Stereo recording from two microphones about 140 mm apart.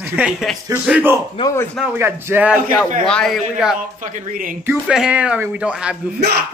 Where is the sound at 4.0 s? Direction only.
70° right (ahead or behind).